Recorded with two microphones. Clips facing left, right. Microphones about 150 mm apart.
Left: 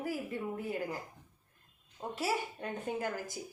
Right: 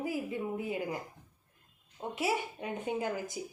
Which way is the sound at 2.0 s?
15° right (ahead or behind).